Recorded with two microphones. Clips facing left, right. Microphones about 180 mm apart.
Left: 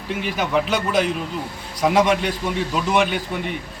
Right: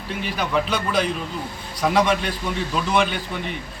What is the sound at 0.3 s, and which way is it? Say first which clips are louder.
A man's voice: left 2 dB; 15° left (ahead or behind).